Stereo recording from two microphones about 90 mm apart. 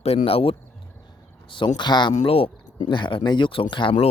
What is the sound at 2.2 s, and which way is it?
Speech, 90° left.